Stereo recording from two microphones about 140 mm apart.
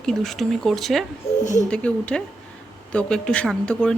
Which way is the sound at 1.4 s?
60° left (ahead or behind).